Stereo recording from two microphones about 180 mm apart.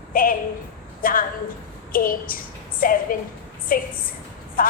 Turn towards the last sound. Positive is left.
turn(degrees=50)  # may be behind; listen again after turning